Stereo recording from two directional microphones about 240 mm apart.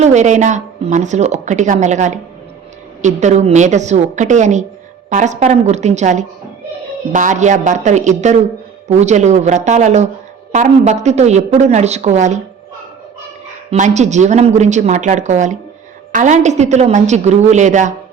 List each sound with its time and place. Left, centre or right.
0.0 s a woman's voice: right
13.7 s a woman's voice: right